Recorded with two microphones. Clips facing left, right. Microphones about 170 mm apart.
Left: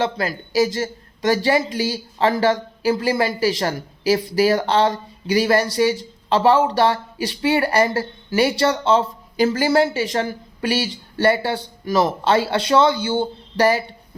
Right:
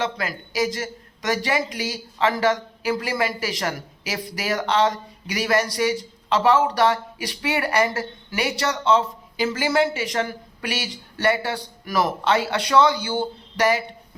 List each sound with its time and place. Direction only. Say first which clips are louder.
0.0 s a man's voice: left 4 dB; 30° left (ahead or behind)